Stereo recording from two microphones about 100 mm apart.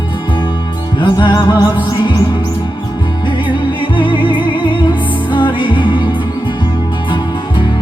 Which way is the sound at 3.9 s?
55° left (ahead or behind).